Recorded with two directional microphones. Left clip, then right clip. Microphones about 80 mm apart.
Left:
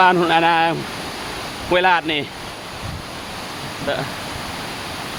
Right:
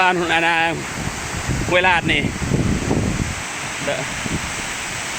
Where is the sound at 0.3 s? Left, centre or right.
Left.